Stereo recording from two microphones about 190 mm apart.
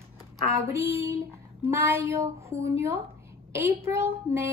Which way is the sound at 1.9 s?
15° right (ahead or behind).